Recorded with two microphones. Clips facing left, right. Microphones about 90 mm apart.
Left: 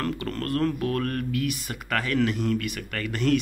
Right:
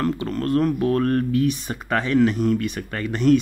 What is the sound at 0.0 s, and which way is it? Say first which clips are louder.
Speech: right 6 dB; 20° right (ahead or behind).